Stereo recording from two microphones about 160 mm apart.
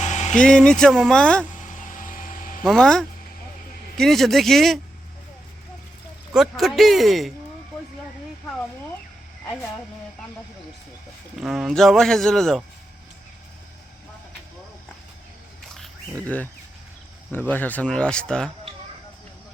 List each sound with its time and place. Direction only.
0.0 s a sound: 50° left (ahead or behind)
0.3 s speech: 5° left (ahead or behind)
1.6 s vehicle: 55° left (ahead or behind)
2.6 s speech: 5° left (ahead or behind)
6.3 s speech: centre (ahead or behind)
11.3 s speech: centre (ahead or behind)
15.7 s a sound: 5° left (ahead or behind)
17.5 s speech: 10° left (ahead or behind)